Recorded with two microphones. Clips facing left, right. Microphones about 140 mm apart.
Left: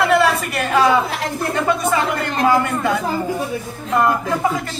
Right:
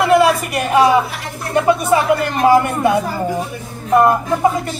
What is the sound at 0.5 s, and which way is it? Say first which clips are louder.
Speech: right 3 dB; 20° right (ahead or behind).